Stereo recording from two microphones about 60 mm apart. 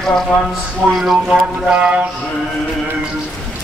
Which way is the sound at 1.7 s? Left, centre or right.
Centre.